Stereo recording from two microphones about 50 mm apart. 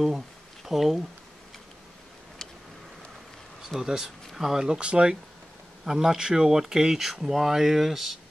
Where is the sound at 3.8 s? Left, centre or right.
Centre.